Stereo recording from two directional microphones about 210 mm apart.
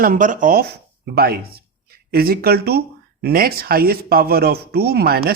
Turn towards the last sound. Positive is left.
turn(degrees=-45)  # may be behind; listen again after turning